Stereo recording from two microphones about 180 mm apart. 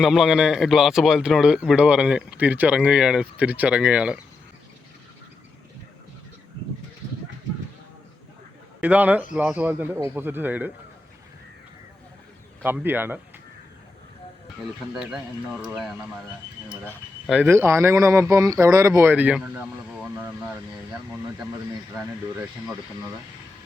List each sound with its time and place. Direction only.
0.0 s speech: 5° right (ahead or behind)
8.8 s speech: 10° right (ahead or behind)
12.6 s speech: 10° right (ahead or behind)
14.9 s speech: 5° right (ahead or behind)
17.2 s speech: 10° right (ahead or behind)